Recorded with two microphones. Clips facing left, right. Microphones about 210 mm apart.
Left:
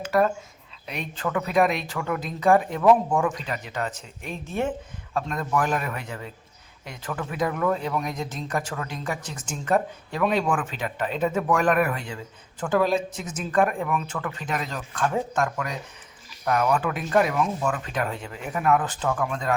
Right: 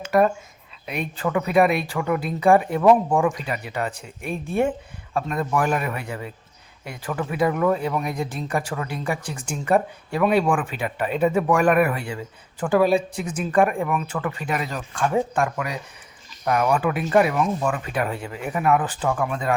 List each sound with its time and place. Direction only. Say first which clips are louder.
0.1 s speech: right 3 dB; 15° right (ahead or behind)
13.1 s speech: right 5 dB; 60° right (ahead or behind)
13.4 s speech: right 3 dB; 5° right (ahead or behind)